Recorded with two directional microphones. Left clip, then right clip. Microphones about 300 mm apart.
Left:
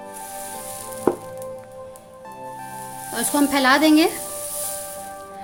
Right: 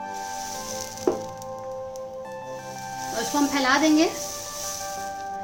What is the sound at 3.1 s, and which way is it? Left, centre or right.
Speech, left.